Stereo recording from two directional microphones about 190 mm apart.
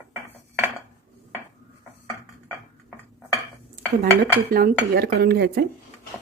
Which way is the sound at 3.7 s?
50° right (ahead or behind).